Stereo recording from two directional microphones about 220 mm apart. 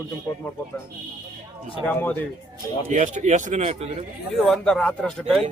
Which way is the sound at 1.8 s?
10° left (ahead or behind).